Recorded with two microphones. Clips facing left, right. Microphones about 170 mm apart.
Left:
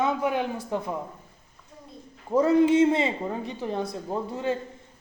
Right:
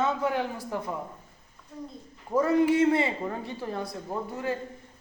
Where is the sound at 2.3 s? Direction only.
20° left (ahead or behind).